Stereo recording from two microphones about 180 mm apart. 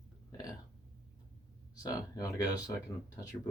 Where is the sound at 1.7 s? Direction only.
20° left (ahead or behind).